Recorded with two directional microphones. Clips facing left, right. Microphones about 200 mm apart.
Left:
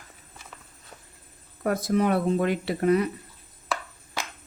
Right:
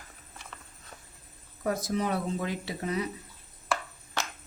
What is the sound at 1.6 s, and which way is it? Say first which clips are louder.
Speech: left 6 dB; 60° left (ahead or behind).